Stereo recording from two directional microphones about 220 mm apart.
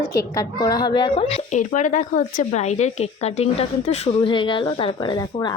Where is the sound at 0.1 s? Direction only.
15° left (ahead or behind).